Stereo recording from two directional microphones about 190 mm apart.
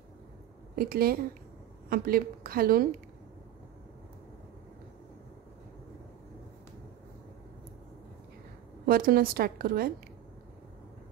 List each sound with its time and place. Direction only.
0.7 s a woman's voice: 50° right (ahead or behind)
8.8 s a woman's voice: 50° right (ahead or behind)